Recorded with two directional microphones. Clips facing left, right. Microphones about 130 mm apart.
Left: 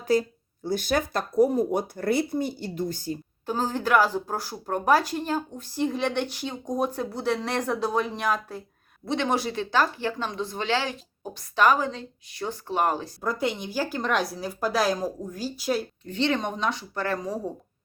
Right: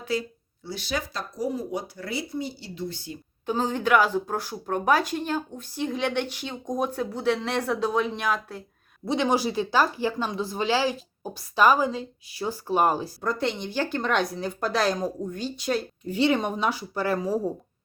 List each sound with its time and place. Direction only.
0.1 s speech: 45° left (ahead or behind)
3.4 s speech: 10° left (ahead or behind)
9.0 s speech: 5° right (ahead or behind)
13.2 s speech: 10° left (ahead or behind)
16.0 s speech: 10° right (ahead or behind)